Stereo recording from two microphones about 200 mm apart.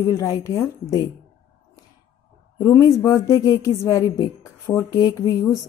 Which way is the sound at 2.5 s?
15° left (ahead or behind).